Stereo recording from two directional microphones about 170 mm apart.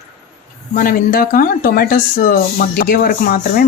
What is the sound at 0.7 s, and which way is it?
Speech, 55° left (ahead or behind).